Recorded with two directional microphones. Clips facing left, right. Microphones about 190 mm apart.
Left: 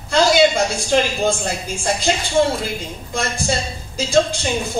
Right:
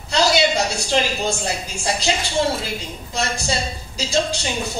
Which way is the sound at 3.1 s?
50° left (ahead or behind).